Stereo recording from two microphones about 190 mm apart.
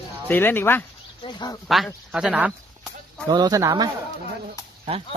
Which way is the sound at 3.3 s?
20° right (ahead or behind).